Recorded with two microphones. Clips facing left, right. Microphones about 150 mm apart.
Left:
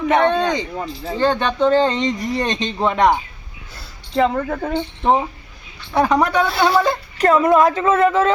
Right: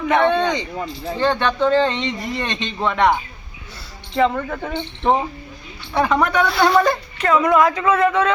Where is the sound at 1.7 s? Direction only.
40° left (ahead or behind).